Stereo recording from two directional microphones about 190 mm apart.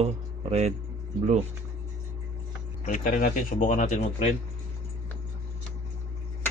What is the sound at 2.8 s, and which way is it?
Speech, 45° left (ahead or behind).